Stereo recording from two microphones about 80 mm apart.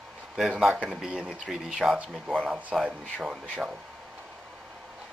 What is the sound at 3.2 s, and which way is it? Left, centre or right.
Speech, centre.